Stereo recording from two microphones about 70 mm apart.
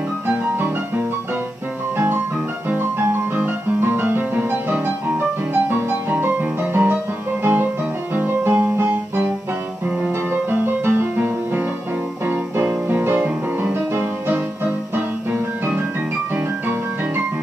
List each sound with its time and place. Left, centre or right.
3.3 s music: right
10.5 s music: right